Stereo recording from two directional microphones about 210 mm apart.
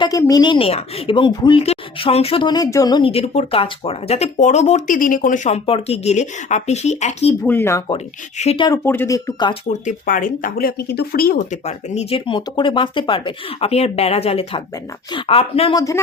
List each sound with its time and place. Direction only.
0.0 s a woman's voice: 15° left (ahead or behind); by 7.3 s 30° left (ahead or behind)
7.4 s speech: 10° left (ahead or behind)
7.9 s a woman's voice: 30° left (ahead or behind)
8.8 s speech: 10° left (ahead or behind)
9.6 s speech: 40° left (ahead or behind)
11.6 s a woman's voice: 30° left (ahead or behind)